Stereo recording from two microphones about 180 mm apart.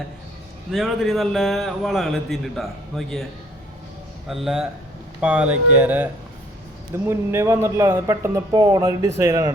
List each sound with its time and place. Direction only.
0.7 s a man's voice: centre (ahead or behind)
4.3 s a man's voice: centre (ahead or behind); by 9.5 s 15° right (ahead or behind)